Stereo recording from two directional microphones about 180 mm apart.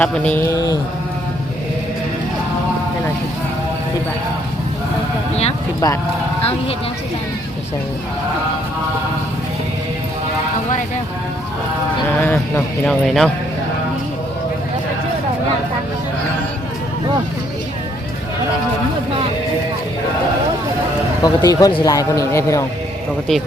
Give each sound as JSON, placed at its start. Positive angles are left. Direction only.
{"t": 0.0, "sound": "a sound", "side_deg": 5}
{"t": 5.8, "sound": "speech", "side_deg": 20}
{"t": 6.4, "sound": "speech", "side_deg": 35}
{"t": 12.2, "sound": "a man's voice", "side_deg": 10}
{"t": 21.2, "sound": "speech", "side_deg": 20}